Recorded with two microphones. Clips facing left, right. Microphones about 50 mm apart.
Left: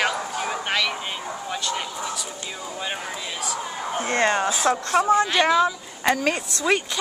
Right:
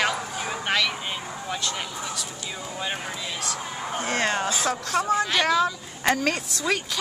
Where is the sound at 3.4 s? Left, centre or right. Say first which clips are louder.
Left 2 dB; centre.